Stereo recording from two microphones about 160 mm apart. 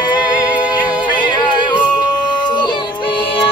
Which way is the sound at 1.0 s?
30° left (ahead or behind).